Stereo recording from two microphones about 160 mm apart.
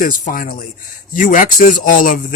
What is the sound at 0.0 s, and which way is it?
Speech, 60° left (ahead or behind).